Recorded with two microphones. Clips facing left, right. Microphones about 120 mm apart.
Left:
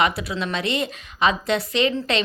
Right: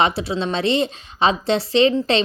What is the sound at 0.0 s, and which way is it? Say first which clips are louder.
A woman's voice: right 3 dB; 30° right (ahead or behind).